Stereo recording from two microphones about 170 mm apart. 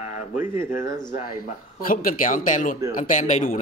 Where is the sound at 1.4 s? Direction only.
55° left (ahead or behind).